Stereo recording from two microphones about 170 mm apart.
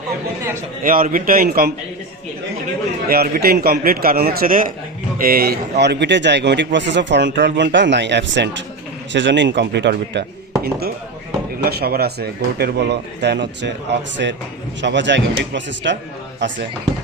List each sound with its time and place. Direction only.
0.8 s a man's voice: 55° right (ahead or behind)
3.1 s a man's voice: 65° right (ahead or behind); by 10.2 s 85° right
10.6 s a man's voice: 65° right (ahead or behind); by 16.6 s 90° right